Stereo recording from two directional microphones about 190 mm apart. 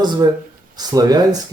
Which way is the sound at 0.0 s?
20° right (ahead or behind).